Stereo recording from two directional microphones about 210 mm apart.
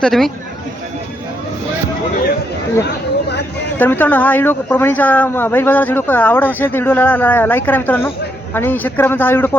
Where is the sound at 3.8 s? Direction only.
10° left (ahead or behind).